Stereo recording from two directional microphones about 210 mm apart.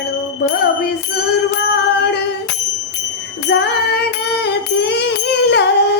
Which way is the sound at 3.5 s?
55° left (ahead or behind).